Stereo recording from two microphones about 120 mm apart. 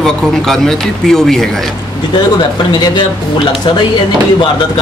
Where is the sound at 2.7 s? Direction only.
40° left (ahead or behind).